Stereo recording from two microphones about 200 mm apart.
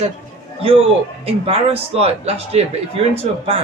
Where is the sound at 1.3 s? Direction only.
30° right (ahead or behind).